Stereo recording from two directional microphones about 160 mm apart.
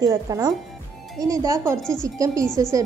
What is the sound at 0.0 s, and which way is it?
A woman's voice, 20° right (ahead or behind).